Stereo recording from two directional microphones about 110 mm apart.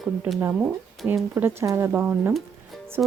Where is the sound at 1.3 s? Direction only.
25° right (ahead or behind).